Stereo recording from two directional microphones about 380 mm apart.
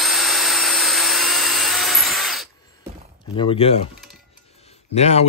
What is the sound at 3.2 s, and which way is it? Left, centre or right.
Speech, centre.